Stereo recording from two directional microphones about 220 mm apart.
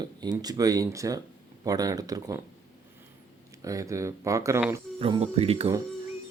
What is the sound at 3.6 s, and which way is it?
Speech, 15° right (ahead or behind).